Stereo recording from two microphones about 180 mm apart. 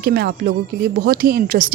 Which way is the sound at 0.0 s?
60° right (ahead or behind).